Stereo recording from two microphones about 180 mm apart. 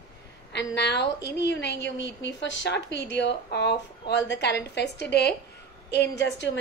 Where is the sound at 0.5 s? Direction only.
70° left (ahead or behind).